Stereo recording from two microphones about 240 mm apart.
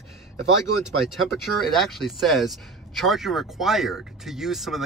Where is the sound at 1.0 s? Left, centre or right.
Centre.